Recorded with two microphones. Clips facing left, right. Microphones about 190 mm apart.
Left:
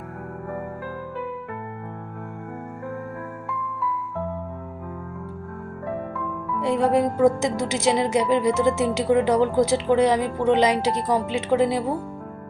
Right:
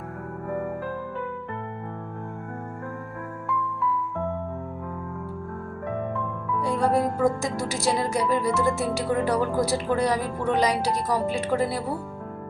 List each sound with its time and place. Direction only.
6.6 s a woman's voice: 20° left (ahead or behind)